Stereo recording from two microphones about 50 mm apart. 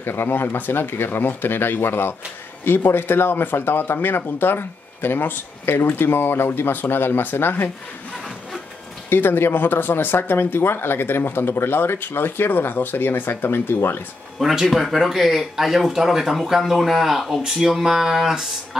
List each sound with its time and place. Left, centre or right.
0.0 s speech: left
9.1 s speech: left
14.4 s speech: centre